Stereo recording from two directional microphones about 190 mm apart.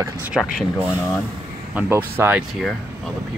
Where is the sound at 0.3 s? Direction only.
Centre (ahead or behind).